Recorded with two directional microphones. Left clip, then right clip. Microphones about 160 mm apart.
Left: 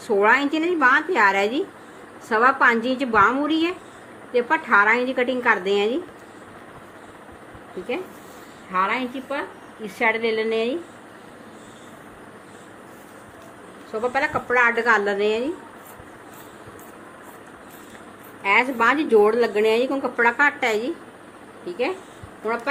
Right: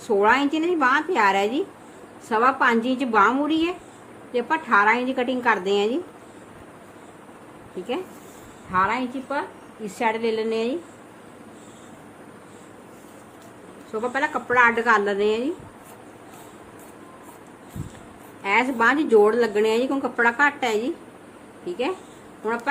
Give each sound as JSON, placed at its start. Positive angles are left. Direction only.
{"t": 0.1, "sound": "a woman's voice", "side_deg": -20}
{"t": 8.7, "sound": "a woman's voice", "side_deg": -45}
{"t": 9.8, "sound": "a woman's voice", "side_deg": -35}
{"t": 14.0, "sound": "a woman's voice", "side_deg": -40}
{"t": 18.4, "sound": "a woman's voice", "side_deg": -35}